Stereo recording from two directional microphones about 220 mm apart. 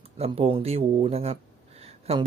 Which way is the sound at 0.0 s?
25° right (ahead or behind).